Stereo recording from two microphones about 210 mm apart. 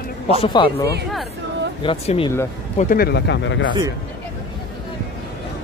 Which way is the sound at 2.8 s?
45° left (ahead or behind).